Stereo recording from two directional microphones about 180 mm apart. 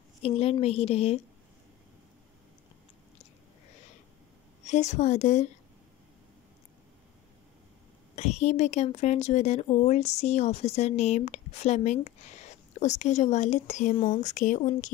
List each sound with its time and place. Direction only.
0.2 s speech: 35° left (ahead or behind)
4.6 s speech: 40° left (ahead or behind)
8.2 s speech: 40° left (ahead or behind)